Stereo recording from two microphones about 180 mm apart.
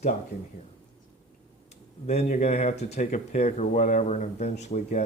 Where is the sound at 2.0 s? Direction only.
40° left (ahead or behind).